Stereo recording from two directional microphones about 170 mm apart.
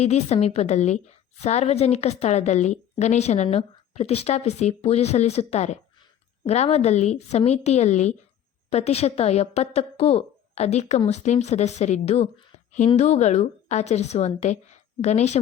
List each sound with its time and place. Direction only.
0.0 s a woman's voice: 40° left (ahead or behind)